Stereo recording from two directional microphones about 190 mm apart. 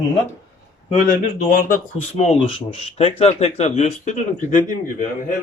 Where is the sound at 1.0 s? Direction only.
45° left (ahead or behind).